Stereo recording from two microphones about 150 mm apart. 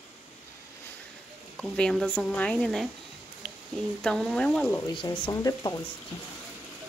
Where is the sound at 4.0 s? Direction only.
5° left (ahead or behind).